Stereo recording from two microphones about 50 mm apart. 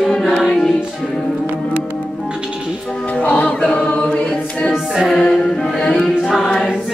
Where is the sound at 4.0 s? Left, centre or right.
Left.